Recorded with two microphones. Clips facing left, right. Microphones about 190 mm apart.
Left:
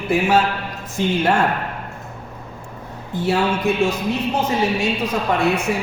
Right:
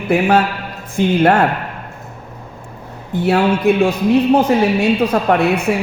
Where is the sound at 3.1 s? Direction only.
60° right (ahead or behind).